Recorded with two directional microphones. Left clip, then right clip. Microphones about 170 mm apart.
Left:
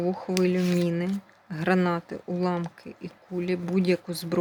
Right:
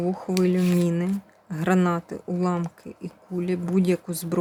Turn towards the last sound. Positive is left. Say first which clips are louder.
# right 1 dB
turn(degrees=-15)  # may be behind; listen again after turning